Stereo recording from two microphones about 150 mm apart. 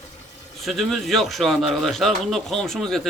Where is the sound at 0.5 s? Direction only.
Centre (ahead or behind).